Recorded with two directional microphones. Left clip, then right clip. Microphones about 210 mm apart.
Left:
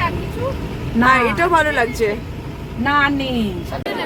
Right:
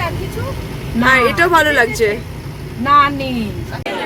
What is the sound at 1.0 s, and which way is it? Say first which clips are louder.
Speech: right 2 dB; centre (ahead or behind).